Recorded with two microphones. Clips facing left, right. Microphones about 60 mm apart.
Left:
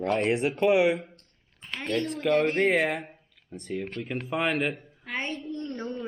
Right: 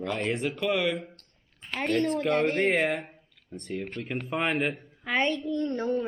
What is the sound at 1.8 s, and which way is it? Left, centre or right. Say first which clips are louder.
Speech: right 4 dB; right.